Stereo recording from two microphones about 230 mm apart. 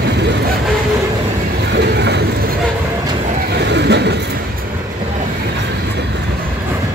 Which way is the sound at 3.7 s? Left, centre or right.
Right.